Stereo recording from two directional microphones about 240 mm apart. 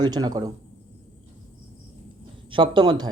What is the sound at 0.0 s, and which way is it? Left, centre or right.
Speech, centre.